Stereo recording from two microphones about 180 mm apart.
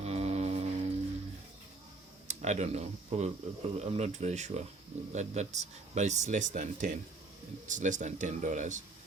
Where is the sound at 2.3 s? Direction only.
40° right (ahead or behind).